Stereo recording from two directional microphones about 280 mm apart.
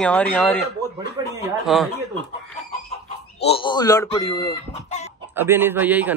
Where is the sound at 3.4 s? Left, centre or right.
Centre.